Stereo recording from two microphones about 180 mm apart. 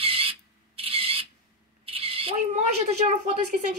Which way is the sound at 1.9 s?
30° right (ahead or behind).